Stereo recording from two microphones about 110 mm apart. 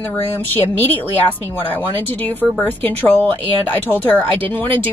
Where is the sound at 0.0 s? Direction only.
20° left (ahead or behind).